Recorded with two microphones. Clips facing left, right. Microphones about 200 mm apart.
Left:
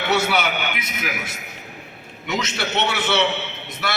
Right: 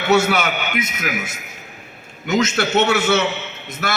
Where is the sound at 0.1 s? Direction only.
45° right (ahead or behind).